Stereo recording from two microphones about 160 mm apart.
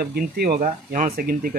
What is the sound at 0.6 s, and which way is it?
Speech, 55° right (ahead or behind).